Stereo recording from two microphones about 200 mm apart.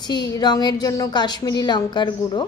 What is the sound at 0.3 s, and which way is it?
A woman's voice, 20° left (ahead or behind).